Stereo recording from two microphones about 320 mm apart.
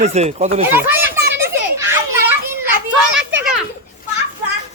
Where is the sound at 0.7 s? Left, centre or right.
Centre.